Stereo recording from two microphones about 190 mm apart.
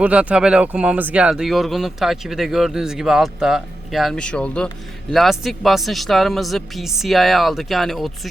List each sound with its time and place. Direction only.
0.0 s speech: 5° right (ahead or behind)